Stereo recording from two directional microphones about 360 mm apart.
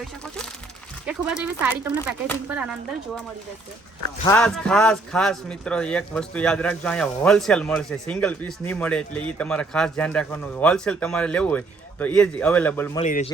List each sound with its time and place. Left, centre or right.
1.0 s speech: centre
4.3 s speech: centre
13.0 s a man's voice: centre